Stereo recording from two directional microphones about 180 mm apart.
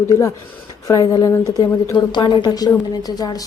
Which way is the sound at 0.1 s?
15° left (ahead or behind).